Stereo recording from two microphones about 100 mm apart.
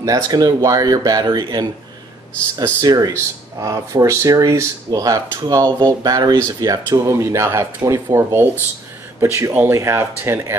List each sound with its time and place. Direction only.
0.0 s speech: 35° right (ahead or behind)
2.8 s speech: 40° right (ahead or behind)
5.6 s speech: 45° right (ahead or behind); by 10.5 s 25° right (ahead or behind)